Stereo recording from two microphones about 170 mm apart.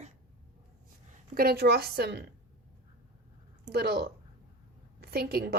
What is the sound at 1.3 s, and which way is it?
Speech, 65° right (ahead or behind).